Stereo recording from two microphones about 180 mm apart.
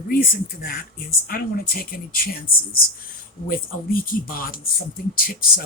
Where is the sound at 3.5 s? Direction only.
55° left (ahead or behind).